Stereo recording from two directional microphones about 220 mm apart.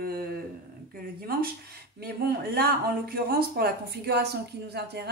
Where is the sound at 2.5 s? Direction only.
45° right (ahead or behind).